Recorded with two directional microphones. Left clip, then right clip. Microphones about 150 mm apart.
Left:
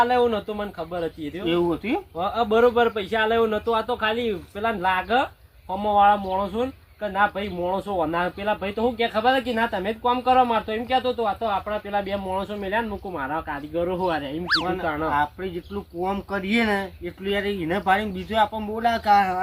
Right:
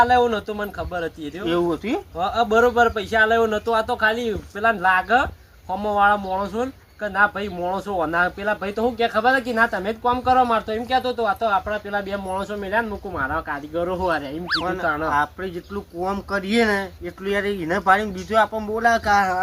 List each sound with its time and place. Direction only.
0.0 s speech: 5° left (ahead or behind)